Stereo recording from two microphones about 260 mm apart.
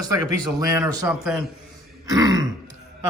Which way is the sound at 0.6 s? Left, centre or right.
Centre.